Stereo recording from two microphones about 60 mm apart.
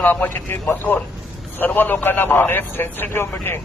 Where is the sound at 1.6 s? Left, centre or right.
Left.